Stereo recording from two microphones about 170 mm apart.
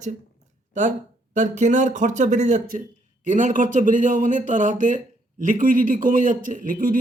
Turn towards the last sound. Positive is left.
turn(degrees=-50)  # may be behind; listen again after turning